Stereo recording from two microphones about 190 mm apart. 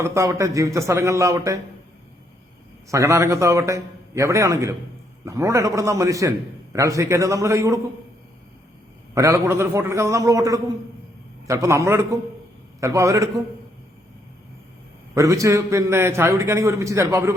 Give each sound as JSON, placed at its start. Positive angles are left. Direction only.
{"t": 0.0, "sound": "a man's voice", "side_deg": -15}
{"t": 2.9, "sound": "a man's voice", "side_deg": -15}
{"t": 9.1, "sound": "a man's voice", "side_deg": -15}
{"t": 15.1, "sound": "a man's voice", "side_deg": -15}